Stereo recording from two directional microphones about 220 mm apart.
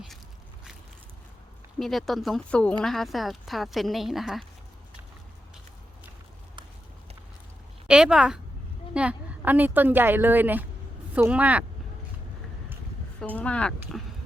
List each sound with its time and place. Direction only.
1.8 s speech: centre (ahead or behind)
7.9 s a woman's voice: 5° right (ahead or behind)
13.3 s speech: 5° left (ahead or behind)